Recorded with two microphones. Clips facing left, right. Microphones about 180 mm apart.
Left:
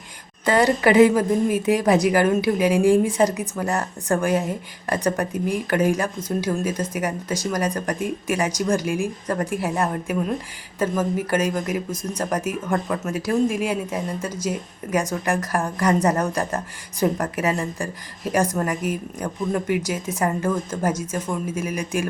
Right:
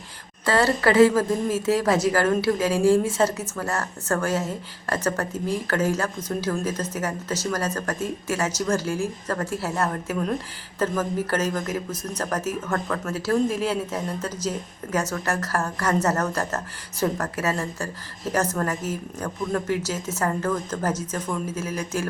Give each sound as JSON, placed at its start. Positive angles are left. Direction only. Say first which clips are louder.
{"t": 0.4, "sound": "speech", "louder": "left 3 dB", "side_deg": 15}